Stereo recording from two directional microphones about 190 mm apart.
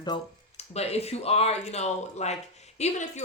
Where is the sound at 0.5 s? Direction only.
35° left (ahead or behind).